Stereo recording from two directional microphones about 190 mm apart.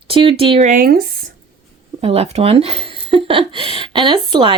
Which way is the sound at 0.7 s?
50° right (ahead or behind).